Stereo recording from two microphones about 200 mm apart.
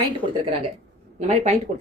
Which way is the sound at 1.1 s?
35° right (ahead or behind).